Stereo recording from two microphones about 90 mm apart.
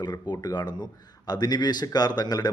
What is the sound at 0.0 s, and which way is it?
A man's voice, 50° left (ahead or behind).